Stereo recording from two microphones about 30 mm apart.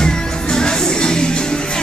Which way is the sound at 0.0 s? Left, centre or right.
Left.